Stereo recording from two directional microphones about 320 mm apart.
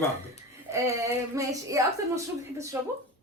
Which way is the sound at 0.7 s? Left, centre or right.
Centre.